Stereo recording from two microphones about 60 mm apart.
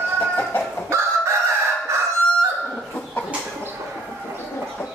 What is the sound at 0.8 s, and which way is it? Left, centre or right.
Chicken, right.